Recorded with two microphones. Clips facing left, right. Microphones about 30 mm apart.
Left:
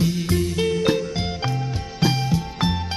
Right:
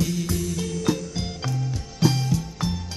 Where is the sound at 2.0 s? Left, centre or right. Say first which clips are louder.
Left 1 dB; left.